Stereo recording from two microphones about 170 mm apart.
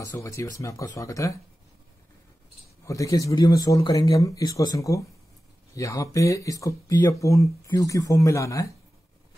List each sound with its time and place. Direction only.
0.0 s speech: 20° left (ahead or behind)
2.8 s speech: 20° left (ahead or behind)